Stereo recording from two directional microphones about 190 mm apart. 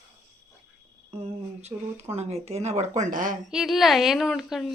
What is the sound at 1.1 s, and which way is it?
Speech, 35° right (ahead or behind).